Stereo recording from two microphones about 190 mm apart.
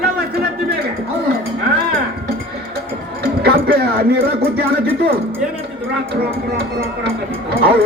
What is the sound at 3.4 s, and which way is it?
Speech, 55° right (ahead or behind).